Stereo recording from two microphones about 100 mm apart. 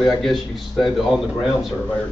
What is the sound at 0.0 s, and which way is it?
Speech, centre (ahead or behind).